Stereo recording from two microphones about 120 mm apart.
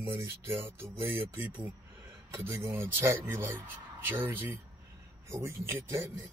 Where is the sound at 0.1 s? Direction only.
20° right (ahead or behind).